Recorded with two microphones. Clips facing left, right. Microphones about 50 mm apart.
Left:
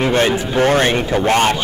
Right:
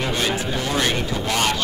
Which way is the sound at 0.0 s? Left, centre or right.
Left.